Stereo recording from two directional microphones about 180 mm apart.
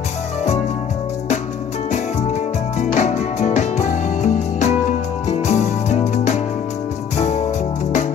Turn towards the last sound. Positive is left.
turn(degrees=40)  # may be behind; listen again after turning